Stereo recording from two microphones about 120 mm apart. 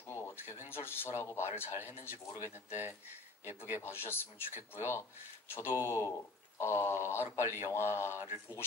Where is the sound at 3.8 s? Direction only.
20° left (ahead or behind).